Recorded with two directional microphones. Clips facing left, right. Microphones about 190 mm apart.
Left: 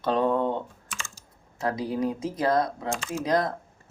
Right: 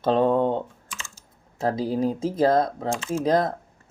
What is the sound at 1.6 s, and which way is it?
Speech, 30° right (ahead or behind).